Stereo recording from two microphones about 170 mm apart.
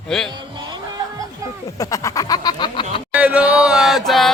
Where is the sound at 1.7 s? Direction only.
20° left (ahead or behind).